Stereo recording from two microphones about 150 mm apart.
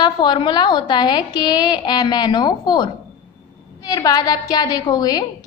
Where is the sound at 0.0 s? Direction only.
30° left (ahead or behind).